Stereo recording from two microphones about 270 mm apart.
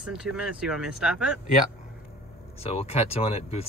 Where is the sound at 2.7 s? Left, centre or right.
Left.